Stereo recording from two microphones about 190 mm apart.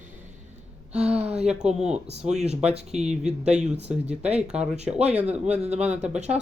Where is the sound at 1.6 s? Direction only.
5° right (ahead or behind).